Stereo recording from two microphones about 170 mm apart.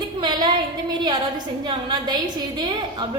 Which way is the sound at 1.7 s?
25° right (ahead or behind).